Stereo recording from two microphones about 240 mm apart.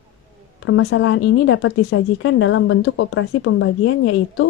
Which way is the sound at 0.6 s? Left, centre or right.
Left.